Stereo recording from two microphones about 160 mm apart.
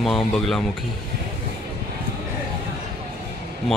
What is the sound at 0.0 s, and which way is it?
Speech, centre (ahead or behind).